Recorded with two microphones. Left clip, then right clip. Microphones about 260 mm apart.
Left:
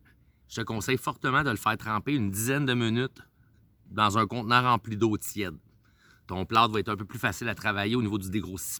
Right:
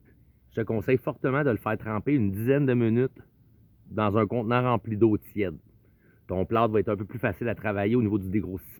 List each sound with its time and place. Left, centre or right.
0.5 s speech: left